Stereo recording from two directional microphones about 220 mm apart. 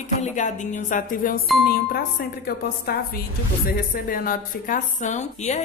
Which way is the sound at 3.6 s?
40° left (ahead or behind).